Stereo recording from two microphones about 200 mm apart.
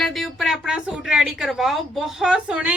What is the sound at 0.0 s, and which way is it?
A woman's voice, centre (ahead or behind).